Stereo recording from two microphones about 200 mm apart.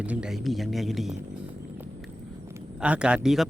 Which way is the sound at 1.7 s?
10° right (ahead or behind).